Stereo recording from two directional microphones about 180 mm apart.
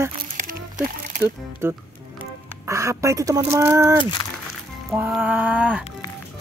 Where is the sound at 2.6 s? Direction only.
15° right (ahead or behind).